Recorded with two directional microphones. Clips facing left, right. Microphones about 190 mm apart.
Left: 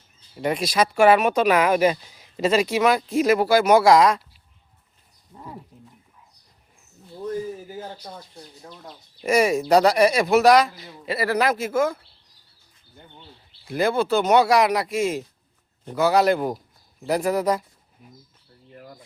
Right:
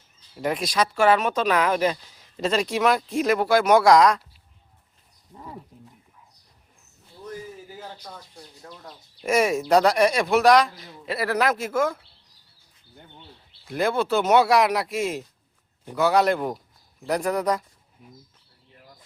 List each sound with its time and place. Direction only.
0.3 s speech: centre (ahead or behind)
5.3 s speech: centre (ahead or behind)
8.6 s speech: 15° left (ahead or behind)
9.2 s speech: centre (ahead or behind)
13.7 s speech: centre (ahead or behind)
18.7 s a sound: 55° left (ahead or behind)